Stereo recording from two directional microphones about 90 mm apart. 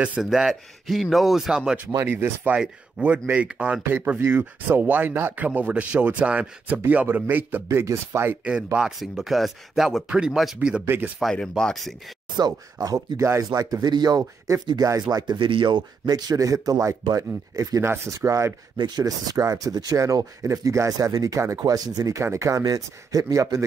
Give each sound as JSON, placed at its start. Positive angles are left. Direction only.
{"t": 0.0, "sound": "speech", "side_deg": -10}
{"t": 2.0, "sound": "speech", "side_deg": -25}
{"t": 2.5, "sound": "speech", "side_deg": -15}
{"t": 7.7, "sound": "speech", "side_deg": -30}
{"t": 8.7, "sound": "speech", "side_deg": -5}
{"t": 11.3, "sound": "speech", "side_deg": 10}
{"t": 12.4, "sound": "speech", "side_deg": -50}
{"t": 13.2, "sound": "speech", "side_deg": -30}
{"t": 13.5, "sound": "speech", "side_deg": -45}
{"t": 18.8, "sound": "speech", "side_deg": -45}